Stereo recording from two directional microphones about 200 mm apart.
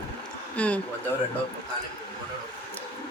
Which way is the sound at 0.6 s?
5° left (ahead or behind).